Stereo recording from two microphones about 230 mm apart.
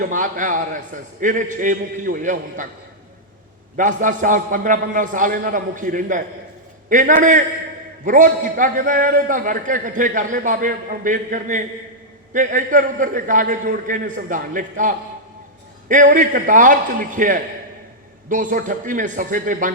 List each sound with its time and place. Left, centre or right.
0.0 s a man's voice: right
3.8 s a man's voice: right